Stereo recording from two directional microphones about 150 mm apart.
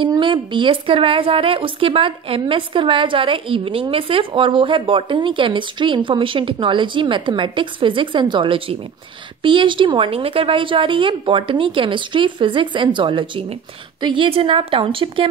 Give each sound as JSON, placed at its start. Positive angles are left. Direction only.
{"t": 0.0, "sound": "a woman's voice", "side_deg": -30}